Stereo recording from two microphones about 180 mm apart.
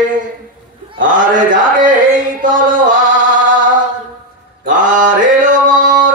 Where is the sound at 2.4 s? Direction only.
45° right (ahead or behind).